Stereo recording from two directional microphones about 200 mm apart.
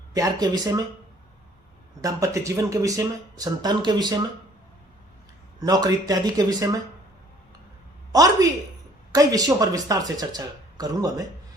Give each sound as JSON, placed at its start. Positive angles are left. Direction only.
{"t": 0.1, "sound": "speech", "side_deg": -20}
{"t": 2.0, "sound": "speech", "side_deg": -15}
{"t": 5.5, "sound": "speech", "side_deg": -20}
{"t": 8.1, "sound": "speech", "side_deg": -20}